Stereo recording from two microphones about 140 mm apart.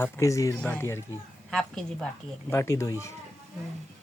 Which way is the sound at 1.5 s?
5° left (ahead or behind).